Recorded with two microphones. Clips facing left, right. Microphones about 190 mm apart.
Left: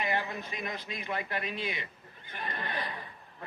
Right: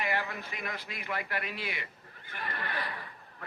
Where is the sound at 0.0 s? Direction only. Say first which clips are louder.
Left 1 dB; 20° left (ahead or behind).